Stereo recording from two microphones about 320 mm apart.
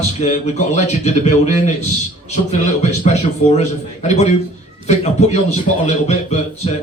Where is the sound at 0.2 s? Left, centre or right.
Left.